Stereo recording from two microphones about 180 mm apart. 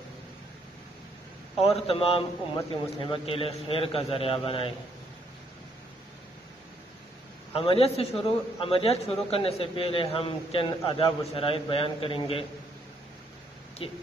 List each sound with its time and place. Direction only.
1.6 s a man's voice: 35° left (ahead or behind)
7.5 s a man's voice: 30° left (ahead or behind)
13.8 s a woman's voice: 30° left (ahead or behind)